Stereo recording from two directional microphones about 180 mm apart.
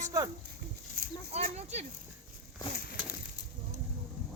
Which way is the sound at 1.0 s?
55° right (ahead or behind).